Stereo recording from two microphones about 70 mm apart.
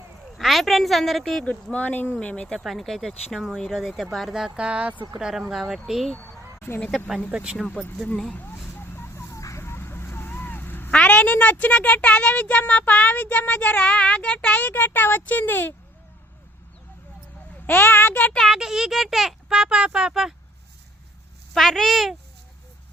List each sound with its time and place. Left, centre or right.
0.3 s a woman's voice: centre
1.7 s speech: left
2.6 s a child's voice: centre; by 5.2 s right
5.5 s speech: centre
6.6 s speech: left
7.3 s a child's voice: centre
7.9 s speech: centre
8.4 s vehicle: left
10.9 s speech: centre
17.7 s speech: left
18.4 s a child's voice: centre
21.5 s speech: centre